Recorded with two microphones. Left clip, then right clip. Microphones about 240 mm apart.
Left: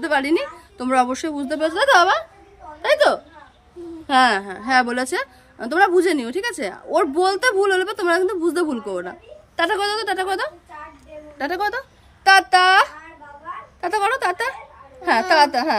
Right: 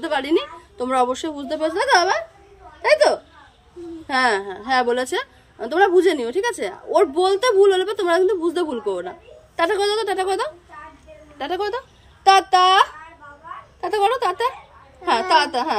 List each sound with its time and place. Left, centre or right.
0.0 s a woman's voice: centre
4.2 s a woman's voice: centre